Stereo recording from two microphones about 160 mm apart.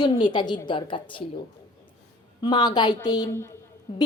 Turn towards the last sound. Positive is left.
turn(degrees=35)  # may be behind; listen again after turning